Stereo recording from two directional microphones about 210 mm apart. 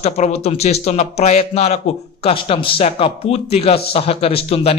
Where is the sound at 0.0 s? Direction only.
30° left (ahead or behind).